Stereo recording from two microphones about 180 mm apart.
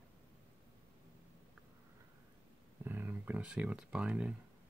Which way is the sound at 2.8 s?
10° right (ahead or behind).